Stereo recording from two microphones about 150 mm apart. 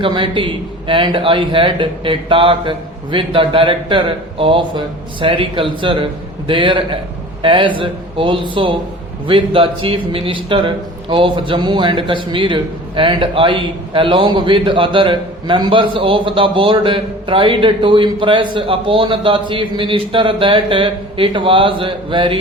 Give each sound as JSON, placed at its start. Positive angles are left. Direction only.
{"t": 0.0, "sound": "a man's voice", "side_deg": -35}